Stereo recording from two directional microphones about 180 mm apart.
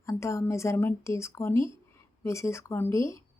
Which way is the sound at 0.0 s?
15° left (ahead or behind).